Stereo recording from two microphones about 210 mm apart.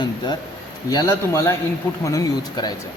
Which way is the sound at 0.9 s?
15° left (ahead or behind).